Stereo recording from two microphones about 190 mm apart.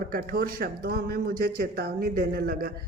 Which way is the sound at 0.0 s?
50° right (ahead or behind).